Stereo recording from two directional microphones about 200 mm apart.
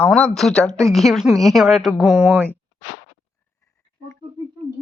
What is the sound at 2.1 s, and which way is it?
Speech, 10° right (ahead or behind).